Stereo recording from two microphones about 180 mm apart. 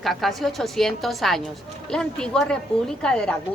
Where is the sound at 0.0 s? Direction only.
Centre (ahead or behind).